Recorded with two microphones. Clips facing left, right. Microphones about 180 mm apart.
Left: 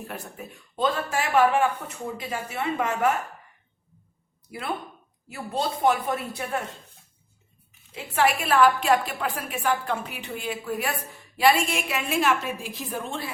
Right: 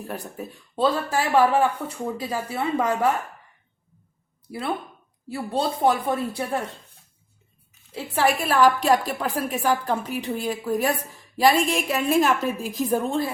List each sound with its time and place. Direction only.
0.0 s a woman's voice: 35° right (ahead or behind)
5.3 s a woman's voice: 35° right (ahead or behind)
7.9 s a woman's voice: 35° right (ahead or behind)